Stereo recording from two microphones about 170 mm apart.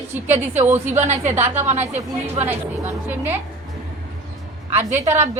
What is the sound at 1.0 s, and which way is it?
Speech, 40° right (ahead or behind).